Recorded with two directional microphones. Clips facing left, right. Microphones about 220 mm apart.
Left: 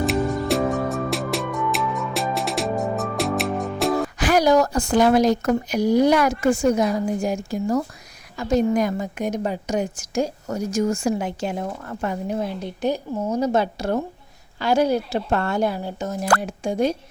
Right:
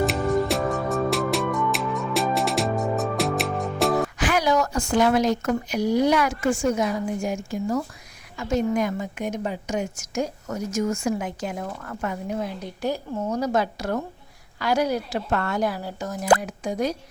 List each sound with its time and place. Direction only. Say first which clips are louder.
0.0 s music: even; centre (ahead or behind)
4.2 s a woman's voice: left 8 dB; 40° left (ahead or behind)
12.8 s a woman's voice: left 3 dB; 20° left (ahead or behind)